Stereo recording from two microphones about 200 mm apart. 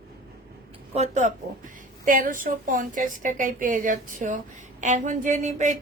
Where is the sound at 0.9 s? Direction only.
35° right (ahead or behind).